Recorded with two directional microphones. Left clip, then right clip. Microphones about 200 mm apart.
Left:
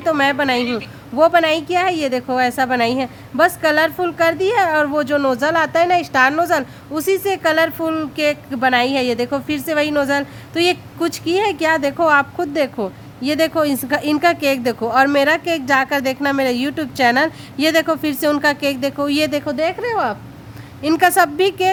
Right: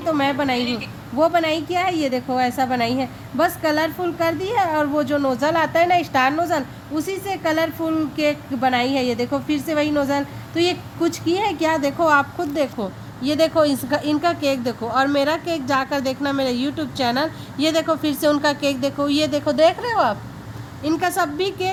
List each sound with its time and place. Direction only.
0.0 s a woman's voice: 25° left (ahead or behind)